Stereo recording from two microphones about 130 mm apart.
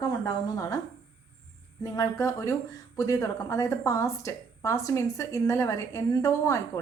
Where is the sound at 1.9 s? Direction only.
25° left (ahead or behind).